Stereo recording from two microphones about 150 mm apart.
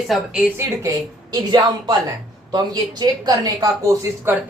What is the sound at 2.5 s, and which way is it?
Speech, 25° right (ahead or behind).